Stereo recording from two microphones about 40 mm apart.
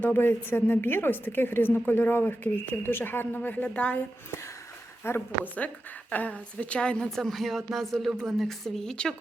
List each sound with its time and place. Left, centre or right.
0.0 s a woman's voice: left
5.0 s a woman's voice: left
5.5 s a woman's voice: left
7.2 s speech: centre